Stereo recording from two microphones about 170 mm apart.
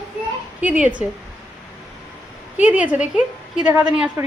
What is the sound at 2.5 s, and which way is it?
A woman's voice, 10° right (ahead or behind).